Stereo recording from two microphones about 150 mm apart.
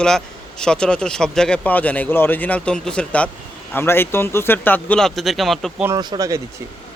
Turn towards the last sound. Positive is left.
turn(degrees=-25)  # may be behind; listen again after turning